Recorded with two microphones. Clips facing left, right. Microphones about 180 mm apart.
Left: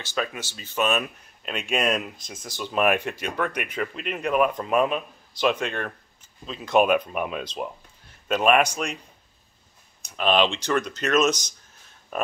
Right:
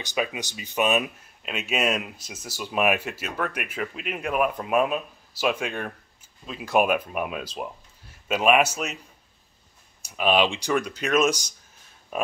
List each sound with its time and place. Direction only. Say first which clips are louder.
0.0 s speech: right 1 dB; 15° right (ahead or behind)
1.4 s speech: left 1 dB; 5° right (ahead or behind)
10.0 s speech: even; 10° right (ahead or behind)